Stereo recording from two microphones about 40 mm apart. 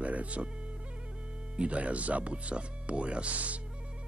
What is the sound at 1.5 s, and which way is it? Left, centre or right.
Speech, right.